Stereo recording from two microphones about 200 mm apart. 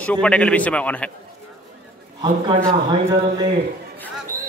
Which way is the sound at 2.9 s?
20° right (ahead or behind).